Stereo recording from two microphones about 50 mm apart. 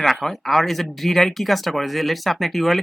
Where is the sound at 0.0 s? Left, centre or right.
Centre.